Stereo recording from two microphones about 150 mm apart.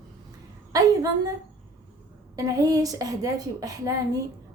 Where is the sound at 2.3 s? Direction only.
25° right (ahead or behind).